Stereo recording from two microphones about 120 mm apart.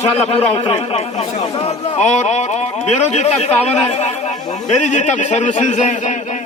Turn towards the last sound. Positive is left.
turn(degrees=85)